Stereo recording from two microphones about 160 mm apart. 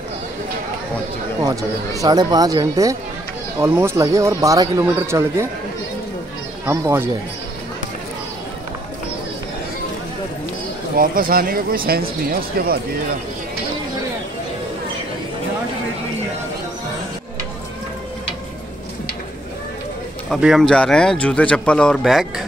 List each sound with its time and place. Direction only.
1.4 s speech: 20° right (ahead or behind)
6.6 s speech: 15° right (ahead or behind)
11.0 s speech: 65° right (ahead or behind)
20.2 s speech: centre (ahead or behind)